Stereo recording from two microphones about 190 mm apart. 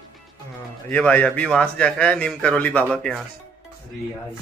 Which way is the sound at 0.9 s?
10° left (ahead or behind).